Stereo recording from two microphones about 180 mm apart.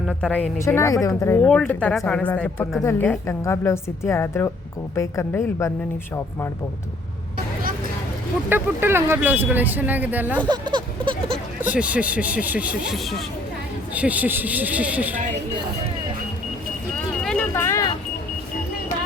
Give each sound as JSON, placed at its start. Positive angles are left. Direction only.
{"t": 0.1, "sound": "speech", "side_deg": 5}
{"t": 1.4, "sound": "speech", "side_deg": 5}
{"t": 8.4, "sound": "speech", "side_deg": -10}
{"t": 10.5, "sound": "a sound", "side_deg": -25}
{"t": 11.6, "sound": "speech", "side_deg": -10}
{"t": 17.2, "sound": "a sound", "side_deg": 5}